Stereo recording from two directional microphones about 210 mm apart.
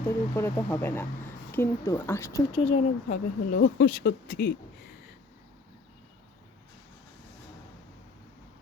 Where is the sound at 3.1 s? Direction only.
45° left (ahead or behind).